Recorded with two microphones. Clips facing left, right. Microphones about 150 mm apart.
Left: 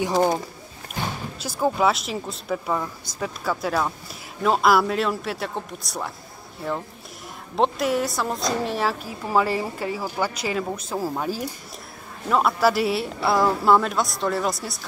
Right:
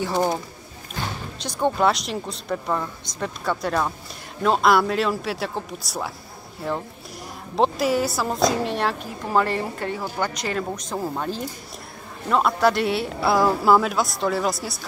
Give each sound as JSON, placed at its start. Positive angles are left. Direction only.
{"t": 1.4, "sound": "speech", "side_deg": 5}
{"t": 7.5, "sound": "speech", "side_deg": 0}